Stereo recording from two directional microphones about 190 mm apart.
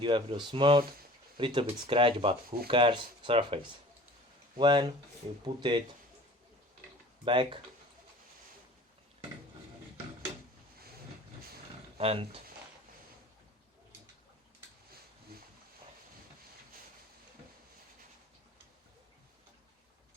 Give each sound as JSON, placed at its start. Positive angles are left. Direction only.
{"t": 0.0, "sound": "speech", "side_deg": -25}
{"t": 7.3, "sound": "speech", "side_deg": -25}
{"t": 11.9, "sound": "speech", "side_deg": -30}